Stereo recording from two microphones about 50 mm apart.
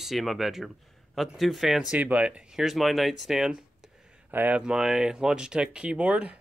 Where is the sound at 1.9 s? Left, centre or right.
Right.